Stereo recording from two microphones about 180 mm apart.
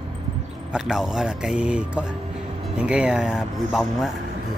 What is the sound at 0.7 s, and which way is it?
Speech, 5° right (ahead or behind).